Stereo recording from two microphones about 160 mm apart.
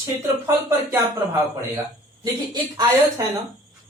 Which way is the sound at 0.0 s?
15° right (ahead or behind).